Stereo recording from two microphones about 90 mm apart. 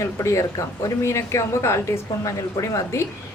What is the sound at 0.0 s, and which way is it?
Speech, 30° left (ahead or behind).